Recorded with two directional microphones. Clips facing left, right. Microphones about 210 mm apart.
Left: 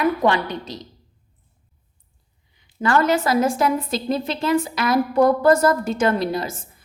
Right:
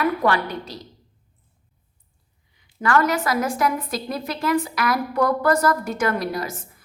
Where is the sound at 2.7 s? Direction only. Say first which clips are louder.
Left 2 dB; 25° left (ahead or behind).